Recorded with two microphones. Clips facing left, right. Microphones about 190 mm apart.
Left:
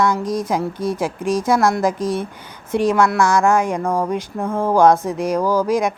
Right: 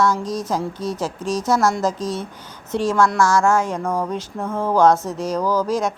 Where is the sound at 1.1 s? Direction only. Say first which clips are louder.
Left 4 dB; 55° left (ahead or behind).